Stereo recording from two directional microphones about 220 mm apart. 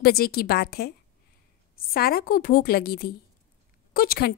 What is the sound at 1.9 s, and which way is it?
A woman's voice, 45° left (ahead or behind).